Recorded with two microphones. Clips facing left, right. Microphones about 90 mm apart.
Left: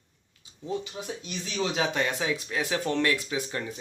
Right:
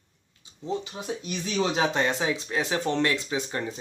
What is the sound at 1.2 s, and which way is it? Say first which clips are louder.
Speech: right 4 dB; 45° right (ahead or behind).